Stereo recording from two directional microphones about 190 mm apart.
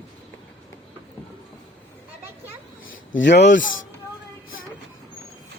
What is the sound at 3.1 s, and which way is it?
Speech, 65° left (ahead or behind).